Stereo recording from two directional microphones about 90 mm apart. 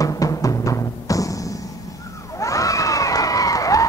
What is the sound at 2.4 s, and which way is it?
Crowd, 40° left (ahead or behind).